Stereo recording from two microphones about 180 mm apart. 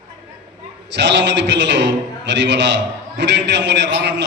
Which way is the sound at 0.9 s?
75° right (ahead or behind).